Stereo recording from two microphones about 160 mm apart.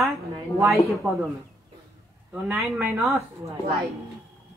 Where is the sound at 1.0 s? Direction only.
20° right (ahead or behind).